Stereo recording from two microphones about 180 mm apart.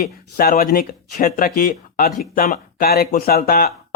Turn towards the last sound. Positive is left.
turn(degrees=55)  # may be behind; listen again after turning